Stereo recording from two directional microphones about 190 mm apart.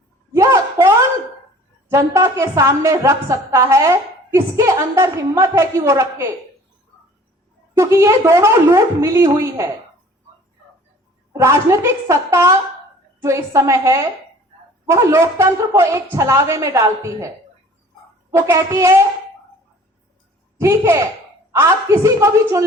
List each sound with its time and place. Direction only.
0.3 s a sound: 15° right (ahead or behind)
1.9 s a woman's voice: 15° right (ahead or behind)
7.8 s a woman's voice: 15° right (ahead or behind)
11.3 s a woman's voice: 15° right (ahead or behind)
18.3 s a woman's voice: 15° right (ahead or behind)
20.6 s a child's voice: 15° right (ahead or behind)